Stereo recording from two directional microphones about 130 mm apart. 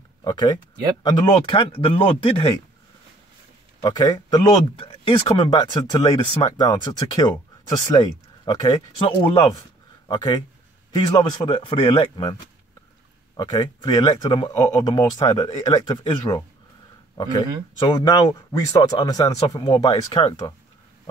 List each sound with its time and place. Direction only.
0.2 s speech: 35° left (ahead or behind)
3.8 s speech: 30° left (ahead or behind)
13.4 s speech: 30° left (ahead or behind)
14.5 s speech: 25° left (ahead or behind)
14.8 s speech: 35° left (ahead or behind)
17.7 s speech: 30° left (ahead or behind)